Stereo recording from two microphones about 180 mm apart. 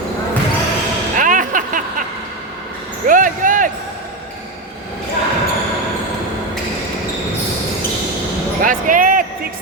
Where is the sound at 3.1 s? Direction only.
50° right (ahead or behind).